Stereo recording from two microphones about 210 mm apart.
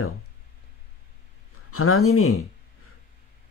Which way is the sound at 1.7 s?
90° left.